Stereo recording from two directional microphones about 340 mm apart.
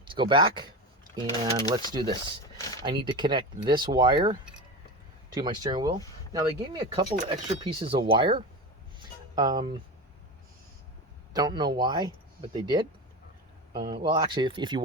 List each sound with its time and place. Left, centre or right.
0.1 s speech: centre
11.3 s speech: centre